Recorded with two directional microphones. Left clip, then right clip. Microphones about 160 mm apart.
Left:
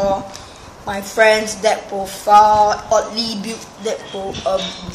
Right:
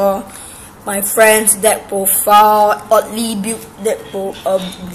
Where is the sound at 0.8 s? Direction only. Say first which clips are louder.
Right 3 dB; 35° right (ahead or behind).